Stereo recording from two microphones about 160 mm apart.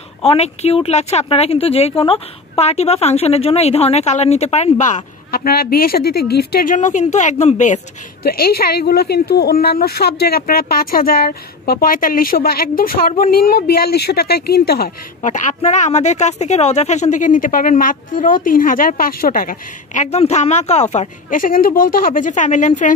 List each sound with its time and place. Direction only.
0.2 s speech: 40° left (ahead or behind)
5.3 s a woman's voice: 70° left (ahead or behind); by 7.8 s 45° left (ahead or behind)
8.2 s speech: 75° left (ahead or behind)
15.2 s a woman's voice: 50° left (ahead or behind)